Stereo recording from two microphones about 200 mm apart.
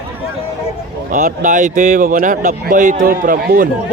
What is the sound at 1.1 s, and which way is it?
Speech, 40° right (ahead or behind).